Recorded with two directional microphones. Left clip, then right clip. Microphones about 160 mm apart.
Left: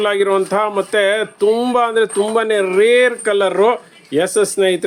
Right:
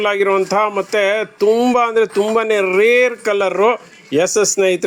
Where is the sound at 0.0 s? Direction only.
10° right (ahead or behind).